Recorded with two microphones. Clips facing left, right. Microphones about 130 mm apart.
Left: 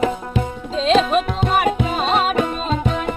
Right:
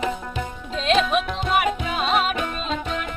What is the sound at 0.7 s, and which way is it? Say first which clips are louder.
Music: left 4 dB; 35° left (ahead or behind).